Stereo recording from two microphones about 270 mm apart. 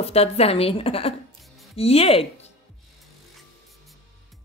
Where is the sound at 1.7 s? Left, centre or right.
Left.